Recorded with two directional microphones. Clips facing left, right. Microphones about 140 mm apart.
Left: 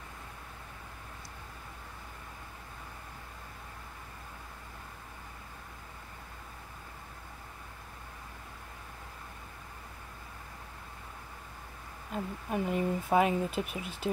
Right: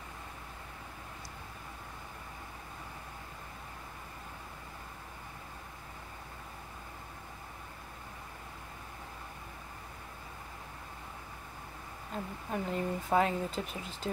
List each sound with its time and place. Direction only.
12.1 s speech: 10° left (ahead or behind)